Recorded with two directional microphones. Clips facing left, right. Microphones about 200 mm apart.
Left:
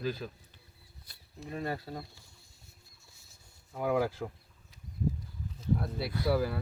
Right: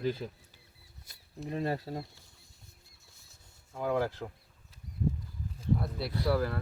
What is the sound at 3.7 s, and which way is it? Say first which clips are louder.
Speech: left 1 dB; 10° left (ahead or behind).